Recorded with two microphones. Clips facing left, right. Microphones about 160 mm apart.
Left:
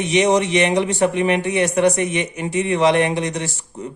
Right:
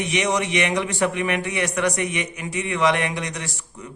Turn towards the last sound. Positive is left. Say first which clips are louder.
# left 7 dB
turn(degrees=25)  # may be behind; listen again after turning